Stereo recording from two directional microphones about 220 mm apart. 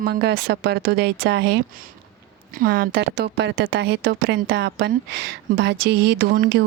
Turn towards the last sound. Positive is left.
turn(degrees=-45)  # may be behind; listen again after turning